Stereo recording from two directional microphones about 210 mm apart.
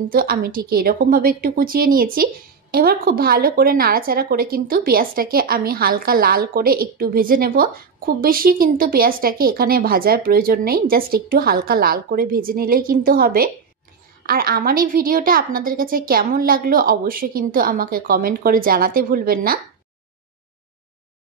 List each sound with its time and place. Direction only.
0.1 s speech: 45° right (ahead or behind)